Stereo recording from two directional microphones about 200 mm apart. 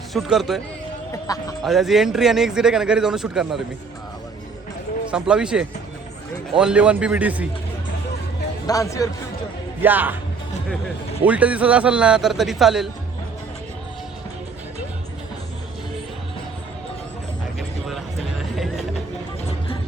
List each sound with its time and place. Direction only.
0.1 s speech: centre (ahead or behind)
1.3 s speech: 15° left (ahead or behind)
1.6 s speech: centre (ahead or behind)
5.1 s a man's voice: 5° right (ahead or behind)
8.6 s speech: 15° left (ahead or behind)
9.8 s a man's voice: 10° right (ahead or behind)
11.3 s speech: 5° right (ahead or behind)
18.5 s music: centre (ahead or behind)